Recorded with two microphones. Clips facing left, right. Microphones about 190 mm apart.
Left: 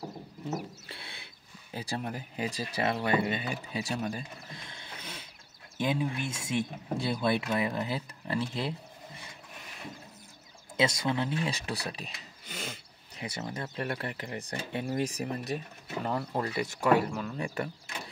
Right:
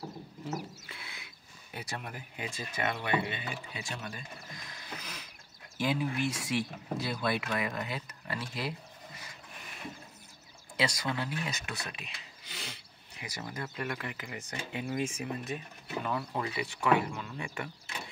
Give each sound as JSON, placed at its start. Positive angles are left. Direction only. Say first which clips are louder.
{"t": 0.8, "sound": "speech", "louder": "left 2 dB", "side_deg": 30}
{"t": 10.8, "sound": "a sound", "louder": "left 4 dB", "side_deg": 25}
{"t": 13.2, "sound": "speech", "louder": "left 3 dB", "side_deg": 25}